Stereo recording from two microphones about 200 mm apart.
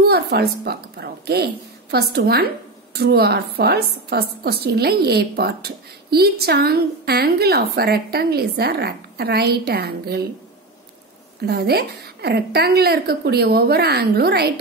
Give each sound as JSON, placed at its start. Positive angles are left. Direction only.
{"t": 0.0, "sound": "speech", "side_deg": -55}
{"t": 11.4, "sound": "speech", "side_deg": -50}